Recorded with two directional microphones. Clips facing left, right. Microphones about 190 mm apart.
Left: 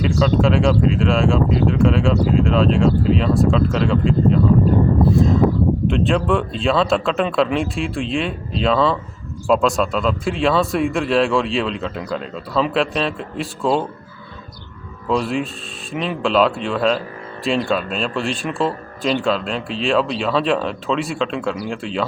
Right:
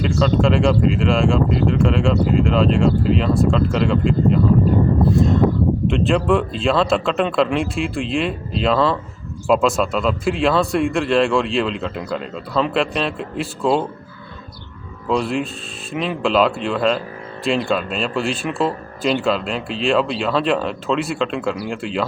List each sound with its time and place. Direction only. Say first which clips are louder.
0.0 s speech: even; centre (ahead or behind)
15.0 s speech: even; centre (ahead or behind)